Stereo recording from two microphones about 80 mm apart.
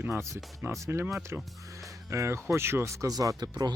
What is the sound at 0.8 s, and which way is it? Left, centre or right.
Speech, right.